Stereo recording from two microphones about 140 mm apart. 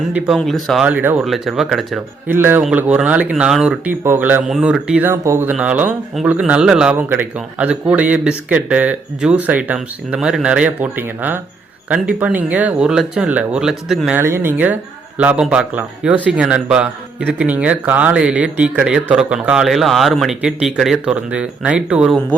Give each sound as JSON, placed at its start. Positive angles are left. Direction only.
{"t": 0.3, "sound": "speech", "side_deg": 0}
{"t": 0.9, "sound": "a man's voice", "side_deg": -10}
{"t": 1.2, "sound": "speech", "side_deg": 0}
{"t": 2.2, "sound": "a man's voice", "side_deg": -15}
{"t": 14.2, "sound": "a man's voice", "side_deg": -15}